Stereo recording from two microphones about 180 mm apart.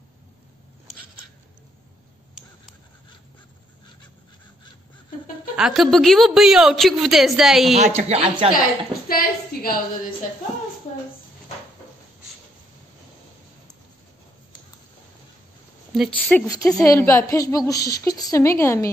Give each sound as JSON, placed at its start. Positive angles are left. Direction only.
{"t": 5.6, "sound": "a woman's voice", "side_deg": 0}
{"t": 7.7, "sound": "speech", "side_deg": -40}
{"t": 9.1, "sound": "a sound", "side_deg": 55}
{"t": 15.9, "sound": "speech", "side_deg": 5}
{"t": 16.4, "sound": "a woman's voice", "side_deg": 20}